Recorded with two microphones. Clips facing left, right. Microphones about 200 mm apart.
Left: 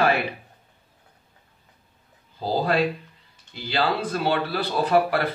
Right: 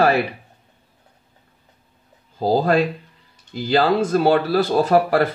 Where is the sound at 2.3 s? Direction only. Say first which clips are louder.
Right 5 dB; 45° right (ahead or behind).